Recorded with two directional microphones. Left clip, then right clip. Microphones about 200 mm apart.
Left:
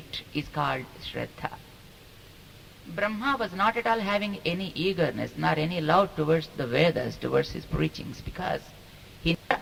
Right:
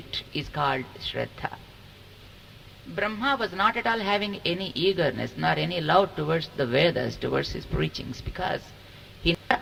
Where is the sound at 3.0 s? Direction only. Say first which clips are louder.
Right 1 dB; 20° right (ahead or behind).